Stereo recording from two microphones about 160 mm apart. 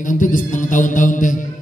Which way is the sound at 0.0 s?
55° left (ahead or behind).